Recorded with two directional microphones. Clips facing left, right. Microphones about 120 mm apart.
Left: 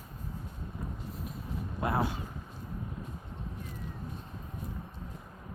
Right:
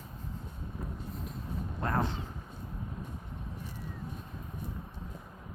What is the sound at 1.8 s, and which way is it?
Speech, 10° left (ahead or behind).